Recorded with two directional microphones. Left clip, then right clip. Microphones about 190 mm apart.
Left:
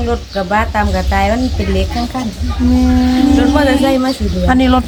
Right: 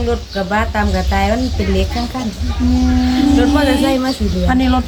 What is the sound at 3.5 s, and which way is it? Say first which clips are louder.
Speech: left 2 dB; centre (ahead or behind).